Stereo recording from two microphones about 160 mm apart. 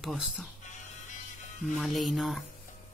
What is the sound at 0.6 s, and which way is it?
Music, 50° left (ahead or behind).